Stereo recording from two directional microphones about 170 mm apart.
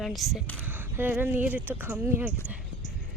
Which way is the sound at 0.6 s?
10° right (ahead or behind).